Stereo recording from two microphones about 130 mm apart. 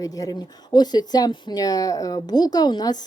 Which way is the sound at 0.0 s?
30° left (ahead or behind).